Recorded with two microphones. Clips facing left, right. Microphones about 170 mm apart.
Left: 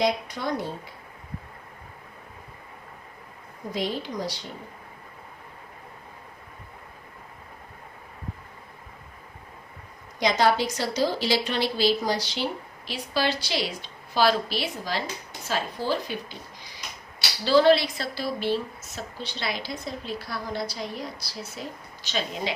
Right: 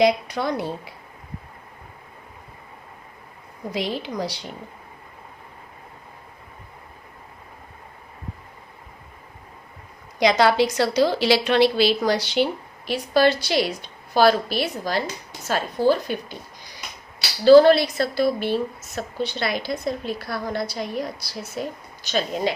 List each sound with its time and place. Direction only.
0.0 s a woman's voice: 75° right (ahead or behind)
3.7 s a woman's voice: 75° right (ahead or behind)
10.2 s a woman's voice: 75° right (ahead or behind); by 16.1 s 50° right (ahead or behind)
17.4 s a woman's voice: 50° right (ahead or behind)